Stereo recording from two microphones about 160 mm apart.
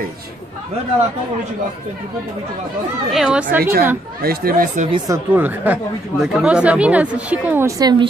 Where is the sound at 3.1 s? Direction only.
5° right (ahead or behind).